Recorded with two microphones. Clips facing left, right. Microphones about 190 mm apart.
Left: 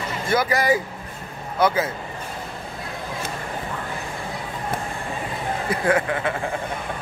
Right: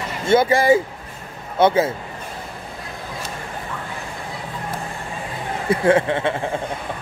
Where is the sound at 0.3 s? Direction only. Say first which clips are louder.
Right 6 dB; 25° right (ahead or behind).